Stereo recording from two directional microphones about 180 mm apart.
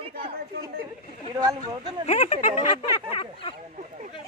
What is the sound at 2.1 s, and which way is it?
Speech, 40° left (ahead or behind).